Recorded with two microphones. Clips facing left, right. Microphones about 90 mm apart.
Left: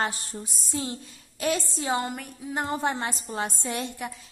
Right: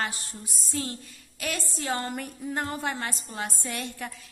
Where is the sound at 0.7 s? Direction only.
20° left (ahead or behind).